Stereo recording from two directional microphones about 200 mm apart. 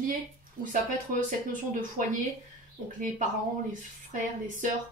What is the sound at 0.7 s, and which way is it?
Speech, 40° right (ahead or behind).